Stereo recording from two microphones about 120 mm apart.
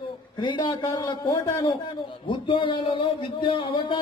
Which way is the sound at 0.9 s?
30° left (ahead or behind).